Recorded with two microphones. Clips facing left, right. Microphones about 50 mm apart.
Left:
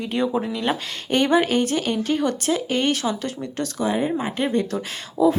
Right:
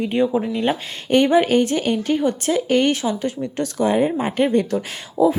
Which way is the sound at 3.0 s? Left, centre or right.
Right.